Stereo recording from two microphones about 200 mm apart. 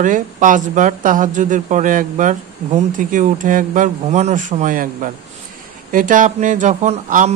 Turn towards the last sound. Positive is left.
turn(degrees=-35)  # may be behind; listen again after turning